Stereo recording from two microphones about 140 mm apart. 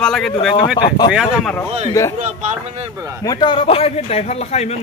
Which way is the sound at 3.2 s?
30° left (ahead or behind).